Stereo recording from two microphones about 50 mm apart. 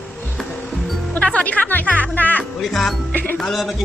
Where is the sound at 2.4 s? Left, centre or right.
Centre.